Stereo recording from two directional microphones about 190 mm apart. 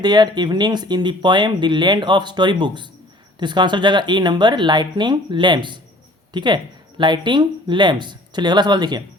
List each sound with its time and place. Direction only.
0.0 s speech: 20° right (ahead or behind)